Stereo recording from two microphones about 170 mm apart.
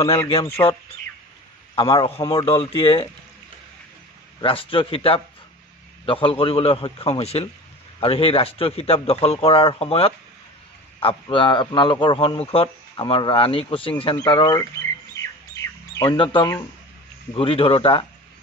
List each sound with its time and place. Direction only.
0.6 s speech: 15° left (ahead or behind)
1.8 s speech: 30° left (ahead or behind)
4.4 s a man's voice: 30° left (ahead or behind)
16.1 s a man's voice: 30° left (ahead or behind)